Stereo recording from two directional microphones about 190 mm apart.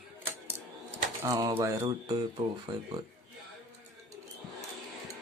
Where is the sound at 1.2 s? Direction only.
15° right (ahead or behind).